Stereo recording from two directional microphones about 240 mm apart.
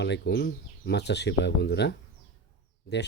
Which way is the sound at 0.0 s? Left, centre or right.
Left.